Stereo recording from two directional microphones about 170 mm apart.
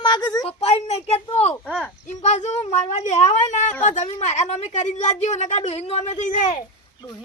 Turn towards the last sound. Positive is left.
turn(degrees=45)  # may be behind; listen again after turning